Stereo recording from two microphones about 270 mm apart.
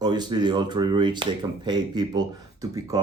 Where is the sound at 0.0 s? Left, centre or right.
Centre.